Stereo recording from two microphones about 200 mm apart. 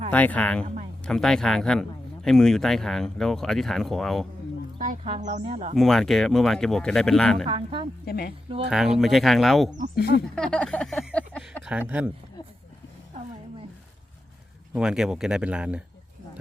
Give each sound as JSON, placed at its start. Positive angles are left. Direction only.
{"t": 0.1, "sound": "speech", "side_deg": 10}
{"t": 0.6, "sound": "speech", "side_deg": -30}
{"t": 1.0, "sound": "speech", "side_deg": 5}
{"t": 4.9, "sound": "speech", "side_deg": -35}
{"t": 5.7, "sound": "speech", "side_deg": 0}
{"t": 7.4, "sound": "speech", "side_deg": -25}
{"t": 8.0, "sound": "speech", "side_deg": 50}
{"t": 8.7, "sound": "speech", "side_deg": 0}
{"t": 9.9, "sound": "speech", "side_deg": 55}
{"t": 10.3, "sound": "a sound", "side_deg": 5}
{"t": 11.6, "sound": "speech", "side_deg": -10}
{"t": 14.7, "sound": "speech", "side_deg": -5}